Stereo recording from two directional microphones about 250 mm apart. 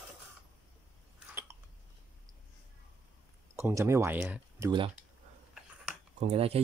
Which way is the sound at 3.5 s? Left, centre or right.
Centre.